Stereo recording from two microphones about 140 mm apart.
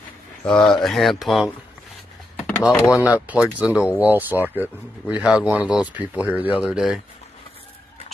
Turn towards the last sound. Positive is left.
turn(degrees=-5)  # may be behind; listen again after turning